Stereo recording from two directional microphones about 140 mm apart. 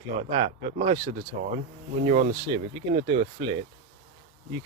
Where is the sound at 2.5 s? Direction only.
40° right (ahead or behind).